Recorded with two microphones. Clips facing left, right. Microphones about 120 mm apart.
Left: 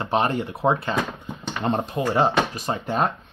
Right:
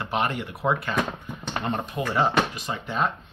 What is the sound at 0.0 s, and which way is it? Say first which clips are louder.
Speech: left 4 dB; 30° left (ahead or behind).